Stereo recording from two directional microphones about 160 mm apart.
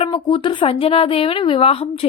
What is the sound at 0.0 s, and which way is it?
Speech, 30° left (ahead or behind).